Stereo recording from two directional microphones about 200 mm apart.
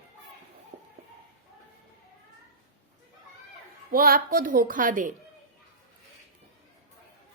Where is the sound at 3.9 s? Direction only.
45° right (ahead or behind).